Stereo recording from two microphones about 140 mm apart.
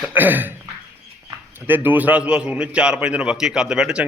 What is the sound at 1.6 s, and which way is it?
A man's voice, 15° right (ahead or behind).